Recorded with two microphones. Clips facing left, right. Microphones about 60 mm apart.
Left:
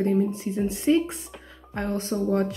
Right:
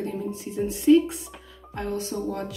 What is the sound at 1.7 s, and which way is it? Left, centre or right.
Speech, left.